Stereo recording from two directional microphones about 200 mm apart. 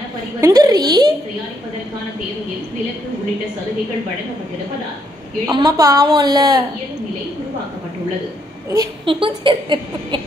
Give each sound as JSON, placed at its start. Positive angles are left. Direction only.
{"t": 0.4, "sound": "a woman's voice", "side_deg": -15}
{"t": 5.5, "sound": "speech", "side_deg": -20}
{"t": 8.6, "sound": "speech", "side_deg": -20}